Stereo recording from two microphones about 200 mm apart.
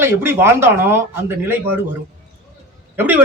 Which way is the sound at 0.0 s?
10° right (ahead or behind).